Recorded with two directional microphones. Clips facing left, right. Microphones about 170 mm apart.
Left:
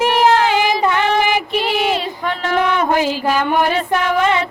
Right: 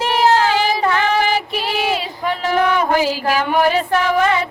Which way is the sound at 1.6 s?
10° right (ahead or behind).